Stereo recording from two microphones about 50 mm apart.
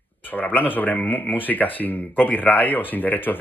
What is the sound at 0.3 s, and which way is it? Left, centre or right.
Speech, left.